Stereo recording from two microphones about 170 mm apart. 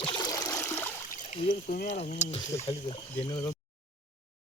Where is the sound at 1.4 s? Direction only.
50° left (ahead or behind).